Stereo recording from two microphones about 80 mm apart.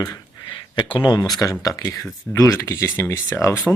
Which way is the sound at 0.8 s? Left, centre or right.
Left.